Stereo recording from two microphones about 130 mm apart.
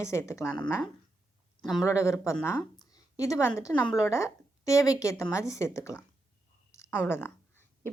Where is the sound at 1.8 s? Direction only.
20° left (ahead or behind).